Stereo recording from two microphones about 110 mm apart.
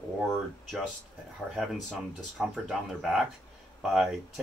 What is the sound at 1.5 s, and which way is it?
Speech, centre (ahead or behind).